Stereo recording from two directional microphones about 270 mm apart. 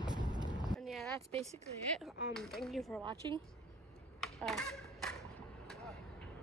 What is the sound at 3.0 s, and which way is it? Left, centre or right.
Speech, centre.